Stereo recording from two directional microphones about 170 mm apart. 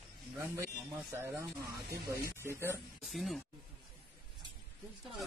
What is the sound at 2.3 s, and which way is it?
Speech, 15° right (ahead or behind).